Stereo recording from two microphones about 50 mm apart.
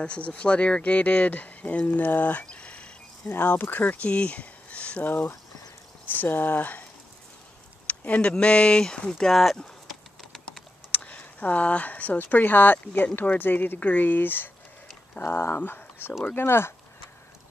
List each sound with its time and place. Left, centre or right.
0.0 s speech: left
3.3 s speech: left
3.6 s speech: left
6.0 s speech: left
7.8 s speech: left
9.3 s speech: centre
10.9 s speech: left